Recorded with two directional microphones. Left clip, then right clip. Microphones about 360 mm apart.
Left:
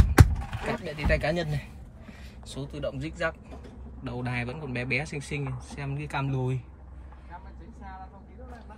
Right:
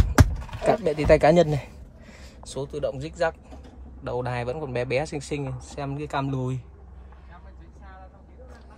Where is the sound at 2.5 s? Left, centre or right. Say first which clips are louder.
Right 6 dB; centre.